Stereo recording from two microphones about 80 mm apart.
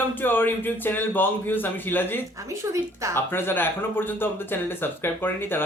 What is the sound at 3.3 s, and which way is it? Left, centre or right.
Speech, left.